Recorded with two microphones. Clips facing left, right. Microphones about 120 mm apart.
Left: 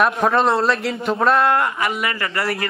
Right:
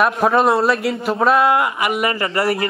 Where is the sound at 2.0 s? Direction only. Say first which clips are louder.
Right 4 dB; 25° right (ahead or behind).